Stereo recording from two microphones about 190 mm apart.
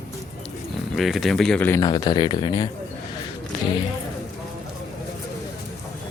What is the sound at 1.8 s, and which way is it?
Speech, 20° left (ahead or behind).